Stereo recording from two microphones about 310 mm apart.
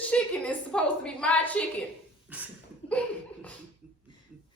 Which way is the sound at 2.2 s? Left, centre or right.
Centre.